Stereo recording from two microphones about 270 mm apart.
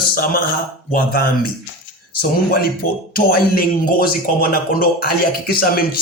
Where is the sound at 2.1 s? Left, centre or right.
Left.